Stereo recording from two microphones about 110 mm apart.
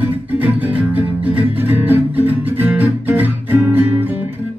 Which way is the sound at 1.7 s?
15° right (ahead or behind).